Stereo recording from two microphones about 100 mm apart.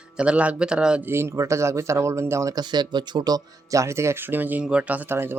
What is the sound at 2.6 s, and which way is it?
Speech, 45° right (ahead or behind).